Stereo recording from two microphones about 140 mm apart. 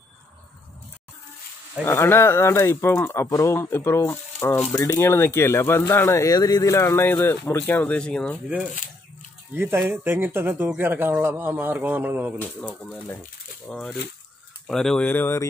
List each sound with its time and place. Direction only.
1.9 s speech: 15° left (ahead or behind)
9.5 s speech: 15° right (ahead or behind)
12.6 s speech: 10° left (ahead or behind)
13.7 s speech: centre (ahead or behind)